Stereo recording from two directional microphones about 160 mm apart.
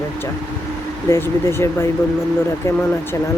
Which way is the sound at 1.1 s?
15° left (ahead or behind).